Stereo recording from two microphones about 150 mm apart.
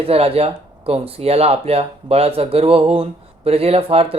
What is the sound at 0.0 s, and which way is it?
Speech, 40° right (ahead or behind).